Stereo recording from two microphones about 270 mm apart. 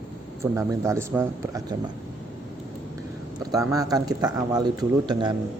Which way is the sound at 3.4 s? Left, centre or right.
Centre.